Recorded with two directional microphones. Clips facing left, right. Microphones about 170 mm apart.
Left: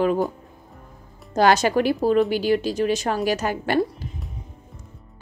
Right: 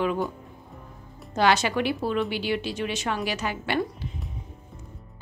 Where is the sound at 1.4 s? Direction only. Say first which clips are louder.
Left 5 dB; 40° left (ahead or behind).